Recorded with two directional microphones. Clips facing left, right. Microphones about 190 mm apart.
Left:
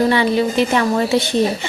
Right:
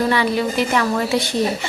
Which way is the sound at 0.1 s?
25° left (ahead or behind).